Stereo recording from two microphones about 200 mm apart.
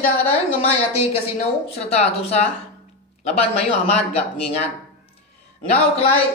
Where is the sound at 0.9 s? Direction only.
30° left (ahead or behind).